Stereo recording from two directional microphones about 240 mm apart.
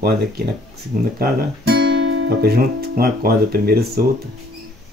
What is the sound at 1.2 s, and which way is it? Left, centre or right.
Speech, right.